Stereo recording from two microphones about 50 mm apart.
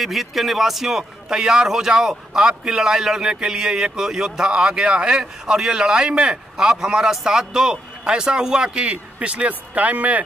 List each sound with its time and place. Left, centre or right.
0.0 s a man's voice: centre; by 10.2 s right